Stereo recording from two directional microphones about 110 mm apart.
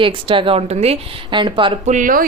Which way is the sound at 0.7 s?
75° right (ahead or behind).